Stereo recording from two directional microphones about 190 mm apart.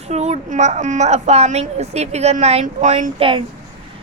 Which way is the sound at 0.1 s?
35° right (ahead or behind).